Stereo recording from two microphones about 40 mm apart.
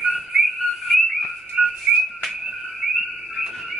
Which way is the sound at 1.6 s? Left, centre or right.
Centre.